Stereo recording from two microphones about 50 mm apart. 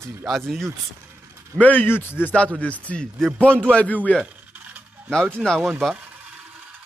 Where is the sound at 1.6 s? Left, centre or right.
Left.